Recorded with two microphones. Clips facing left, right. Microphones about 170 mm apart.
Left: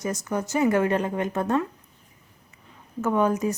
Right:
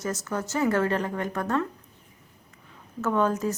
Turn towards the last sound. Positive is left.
turn(degrees=15)  # may be behind; listen again after turning